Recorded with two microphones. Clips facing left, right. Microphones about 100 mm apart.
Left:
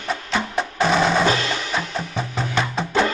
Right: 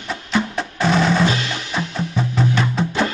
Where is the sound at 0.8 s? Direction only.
10° left (ahead or behind).